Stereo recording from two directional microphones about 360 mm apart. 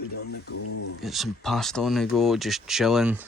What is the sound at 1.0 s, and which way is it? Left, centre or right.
A man's voice, centre.